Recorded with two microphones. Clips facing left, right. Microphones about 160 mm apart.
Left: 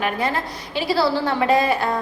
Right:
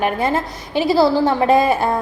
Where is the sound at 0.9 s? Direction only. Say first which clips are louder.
Right 5 dB; 20° right (ahead or behind).